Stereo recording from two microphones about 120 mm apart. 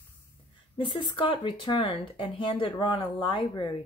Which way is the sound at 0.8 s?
40° left (ahead or behind).